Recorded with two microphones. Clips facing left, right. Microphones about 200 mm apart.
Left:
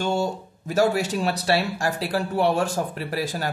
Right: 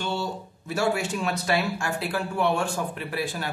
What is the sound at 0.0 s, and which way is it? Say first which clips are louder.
Speech: left 5 dB; 45° left (ahead or behind).